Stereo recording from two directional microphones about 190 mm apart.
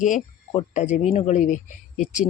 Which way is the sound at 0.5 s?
40° left (ahead or behind).